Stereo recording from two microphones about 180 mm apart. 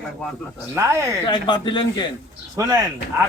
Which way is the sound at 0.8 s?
15° right (ahead or behind).